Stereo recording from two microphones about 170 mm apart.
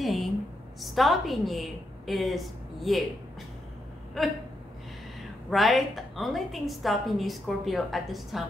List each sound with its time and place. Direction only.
0.0 s a sound: centre (ahead or behind)
0.7 s a woman's voice: centre (ahead or behind)
4.2 s a woman's voice: centre (ahead or behind)
5.5 s a woman's voice: centre (ahead or behind)